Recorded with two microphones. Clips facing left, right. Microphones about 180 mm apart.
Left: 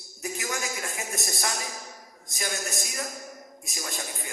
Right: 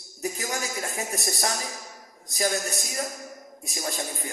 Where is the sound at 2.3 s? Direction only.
35° right (ahead or behind).